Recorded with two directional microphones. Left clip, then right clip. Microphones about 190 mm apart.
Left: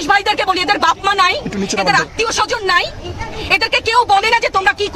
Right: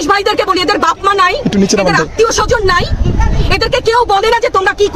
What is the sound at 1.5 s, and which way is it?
Speech, 40° right (ahead or behind).